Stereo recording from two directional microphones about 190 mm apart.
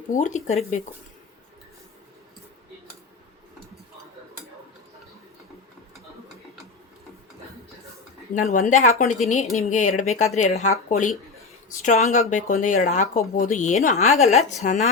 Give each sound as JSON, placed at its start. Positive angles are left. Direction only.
{"t": 0.2, "sound": "speech", "side_deg": 40}
{"t": 8.4, "sound": "speech", "side_deg": 40}